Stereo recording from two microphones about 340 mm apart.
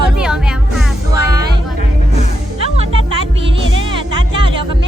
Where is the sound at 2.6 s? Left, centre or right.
Centre.